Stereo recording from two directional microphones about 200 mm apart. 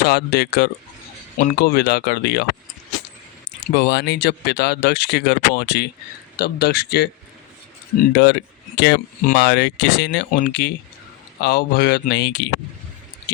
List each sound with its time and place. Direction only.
0.0 s speech: 55° left (ahead or behind)
1.4 s speech: 45° left (ahead or behind)
3.8 s speech: 55° left (ahead or behind)
8.1 s speech: 55° left (ahead or behind)
10.3 s speech: 45° left (ahead or behind)